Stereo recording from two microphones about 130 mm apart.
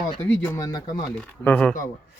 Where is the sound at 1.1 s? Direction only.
10° left (ahead or behind).